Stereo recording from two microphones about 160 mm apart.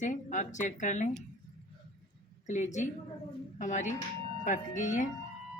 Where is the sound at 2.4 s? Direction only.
50° left (ahead or behind).